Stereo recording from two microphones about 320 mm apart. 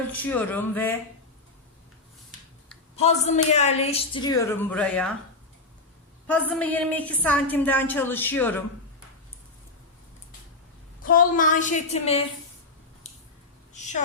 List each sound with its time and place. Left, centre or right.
0.1 s a woman's voice: centre
2.9 s a woman's voice: centre
6.4 s a woman's voice: centre
11.0 s a woman's voice: left
13.7 s speech: left